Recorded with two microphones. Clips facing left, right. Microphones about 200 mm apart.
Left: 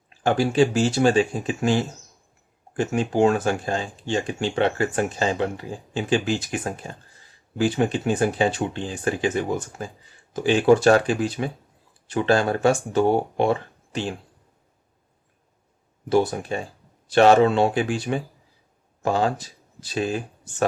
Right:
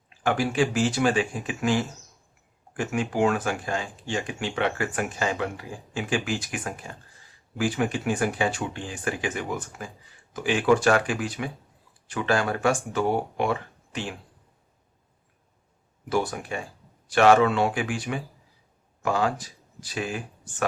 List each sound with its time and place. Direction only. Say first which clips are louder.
0.2 s speech: left 5 dB; 30° left (ahead or behind)
16.0 s speech: left 6 dB; 25° left (ahead or behind)